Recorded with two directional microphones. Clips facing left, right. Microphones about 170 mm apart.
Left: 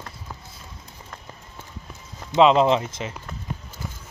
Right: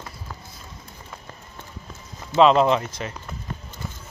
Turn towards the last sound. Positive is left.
turn(degrees=20)  # may be behind; listen again after turning